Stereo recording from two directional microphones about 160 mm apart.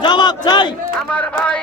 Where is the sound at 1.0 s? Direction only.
10° left (ahead or behind).